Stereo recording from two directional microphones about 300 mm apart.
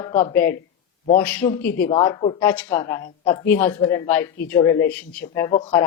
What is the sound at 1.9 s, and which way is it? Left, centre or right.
Speech, centre.